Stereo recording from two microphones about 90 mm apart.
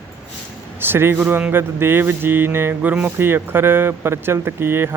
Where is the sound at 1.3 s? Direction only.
20° right (ahead or behind).